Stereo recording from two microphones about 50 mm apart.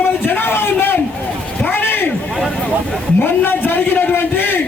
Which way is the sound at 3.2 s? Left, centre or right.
Left.